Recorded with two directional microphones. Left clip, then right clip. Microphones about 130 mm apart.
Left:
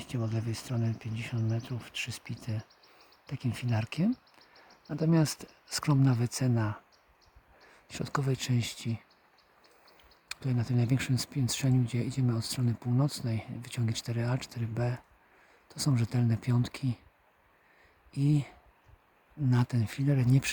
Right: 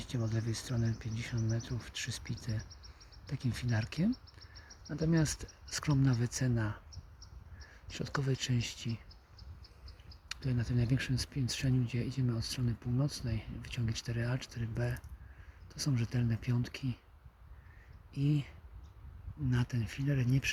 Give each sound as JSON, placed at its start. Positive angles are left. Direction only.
{"t": 0.0, "sound": "speech", "side_deg": 10}
{"t": 2.6, "sound": "a sound", "side_deg": -90}
{"t": 3.2, "sound": "speech", "side_deg": 5}
{"t": 4.1, "sound": "a sound", "side_deg": -90}
{"t": 4.9, "sound": "speech", "side_deg": 15}
{"t": 7.9, "sound": "speech", "side_deg": 20}
{"t": 10.2, "sound": "speech", "side_deg": 20}
{"t": 18.1, "sound": "speech", "side_deg": 25}